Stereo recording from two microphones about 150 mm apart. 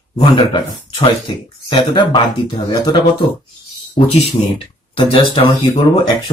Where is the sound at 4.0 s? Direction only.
45° left (ahead or behind).